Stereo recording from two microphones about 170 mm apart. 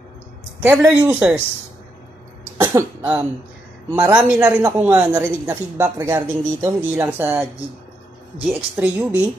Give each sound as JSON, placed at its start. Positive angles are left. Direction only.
{"t": 0.6, "sound": "speech", "side_deg": -10}
{"t": 2.5, "sound": "cough", "side_deg": -20}
{"t": 3.0, "sound": "speech", "side_deg": -10}